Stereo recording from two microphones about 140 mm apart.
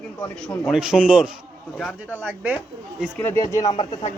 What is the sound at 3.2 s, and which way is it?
Speech, 20° left (ahead or behind).